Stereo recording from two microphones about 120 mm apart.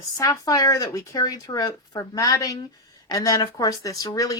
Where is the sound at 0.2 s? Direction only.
30° left (ahead or behind).